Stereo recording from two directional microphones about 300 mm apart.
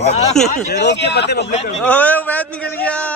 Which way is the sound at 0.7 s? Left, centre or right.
Left.